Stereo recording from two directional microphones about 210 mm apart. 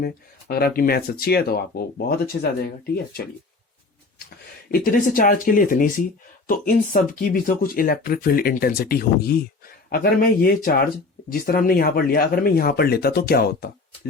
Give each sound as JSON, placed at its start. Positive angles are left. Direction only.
{"t": 0.0, "sound": "speech", "side_deg": 45}
{"t": 4.7, "sound": "speech", "side_deg": 40}